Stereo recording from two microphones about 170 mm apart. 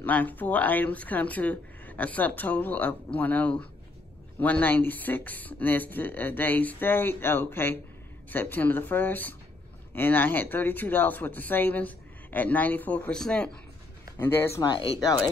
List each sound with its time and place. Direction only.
0.0 s speech: 10° left (ahead or behind)